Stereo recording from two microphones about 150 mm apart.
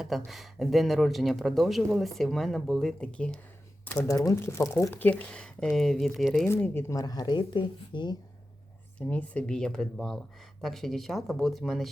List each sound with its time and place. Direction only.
0.3 s a man's voice: centre (ahead or behind)
6.5 s speech: 15° left (ahead or behind)
9.0 s a man's voice: 10° left (ahead or behind)